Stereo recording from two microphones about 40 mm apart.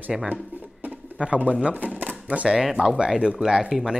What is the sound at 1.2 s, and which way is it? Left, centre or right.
Speech, right.